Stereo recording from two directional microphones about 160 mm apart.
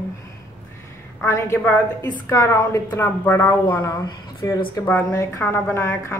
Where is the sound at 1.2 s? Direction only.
15° left (ahead or behind).